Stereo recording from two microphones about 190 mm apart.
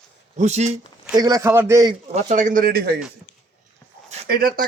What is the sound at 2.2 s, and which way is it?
Speech, 40° right (ahead or behind).